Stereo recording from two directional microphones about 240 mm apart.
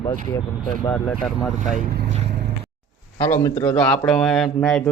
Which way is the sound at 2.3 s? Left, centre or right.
Right.